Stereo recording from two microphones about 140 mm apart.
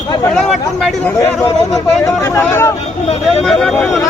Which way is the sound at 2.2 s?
20° left (ahead or behind).